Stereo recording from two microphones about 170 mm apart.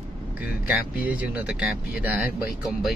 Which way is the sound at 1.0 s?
10° right (ahead or behind).